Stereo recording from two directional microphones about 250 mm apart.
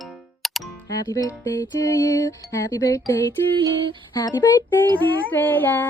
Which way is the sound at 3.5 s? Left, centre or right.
Centre.